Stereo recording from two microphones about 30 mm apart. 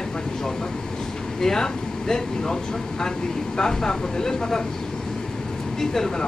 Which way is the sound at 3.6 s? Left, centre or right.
Left.